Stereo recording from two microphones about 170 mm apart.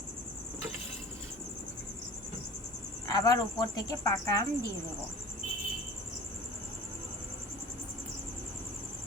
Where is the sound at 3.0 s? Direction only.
20° left (ahead or behind).